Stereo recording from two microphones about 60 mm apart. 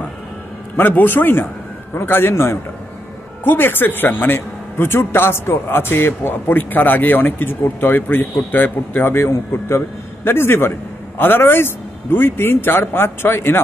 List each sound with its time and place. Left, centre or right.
0.7 s a man's voice: left